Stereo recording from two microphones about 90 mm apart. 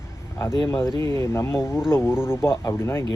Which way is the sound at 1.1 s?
30° left (ahead or behind).